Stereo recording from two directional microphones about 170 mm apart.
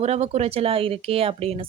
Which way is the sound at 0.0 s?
40° right (ahead or behind).